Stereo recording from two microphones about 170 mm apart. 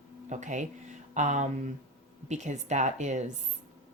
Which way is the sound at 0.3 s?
45° right (ahead or behind).